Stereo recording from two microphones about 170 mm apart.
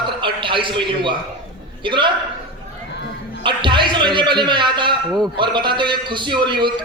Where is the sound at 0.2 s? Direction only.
30° right (ahead or behind).